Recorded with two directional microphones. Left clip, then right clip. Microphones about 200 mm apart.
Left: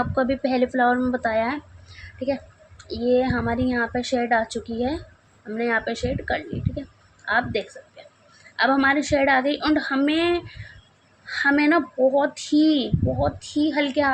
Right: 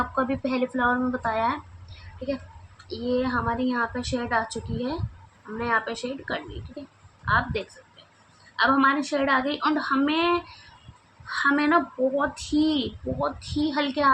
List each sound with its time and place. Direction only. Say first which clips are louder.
0.0 s speech: left 3 dB; 25° left (ahead or behind)